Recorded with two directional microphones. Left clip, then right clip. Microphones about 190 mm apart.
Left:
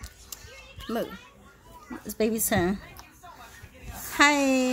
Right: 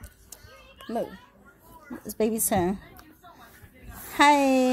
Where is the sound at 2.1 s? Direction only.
15° right (ahead or behind).